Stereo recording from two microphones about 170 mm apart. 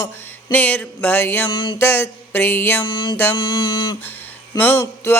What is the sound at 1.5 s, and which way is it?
Mantra, 30° left (ahead or behind).